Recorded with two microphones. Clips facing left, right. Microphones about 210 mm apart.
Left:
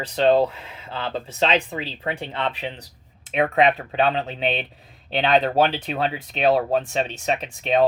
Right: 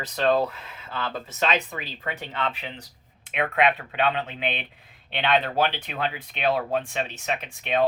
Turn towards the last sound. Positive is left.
turn(degrees=35)  # may be behind; listen again after turning